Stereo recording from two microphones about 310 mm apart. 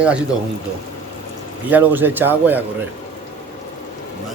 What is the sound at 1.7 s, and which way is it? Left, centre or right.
Speech, centre.